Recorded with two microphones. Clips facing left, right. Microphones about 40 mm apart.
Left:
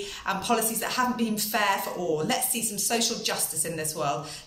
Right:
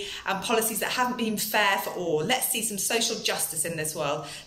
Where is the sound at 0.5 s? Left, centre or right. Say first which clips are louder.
Right 1 dB; right.